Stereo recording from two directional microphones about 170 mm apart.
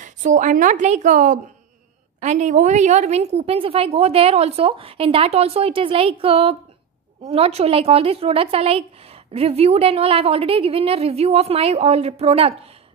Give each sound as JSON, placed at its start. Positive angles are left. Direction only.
{"t": 0.0, "sound": "a woman's voice", "side_deg": -50}